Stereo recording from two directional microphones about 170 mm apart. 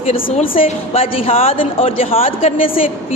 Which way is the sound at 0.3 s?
35° left (ahead or behind).